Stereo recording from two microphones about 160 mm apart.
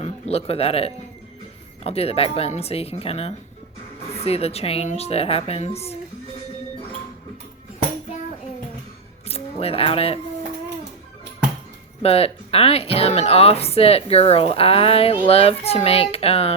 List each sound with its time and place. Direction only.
0.0 s speech: 40° left (ahead or behind)
9.3 s speech: 40° left (ahead or behind)
12.0 s speech: 40° left (ahead or behind)